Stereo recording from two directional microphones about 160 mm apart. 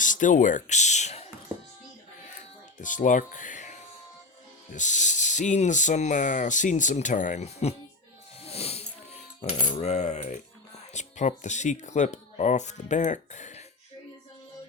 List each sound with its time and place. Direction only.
0.0 s speech: 55° left (ahead or behind)
2.3 s music: 55° left (ahead or behind)
4.7 s speech: 50° left (ahead or behind)
8.4 s coin: 40° left (ahead or behind)
10.9 s speech: 45° left (ahead or behind)